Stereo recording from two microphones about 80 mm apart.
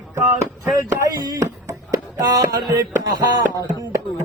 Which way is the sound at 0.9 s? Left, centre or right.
Right.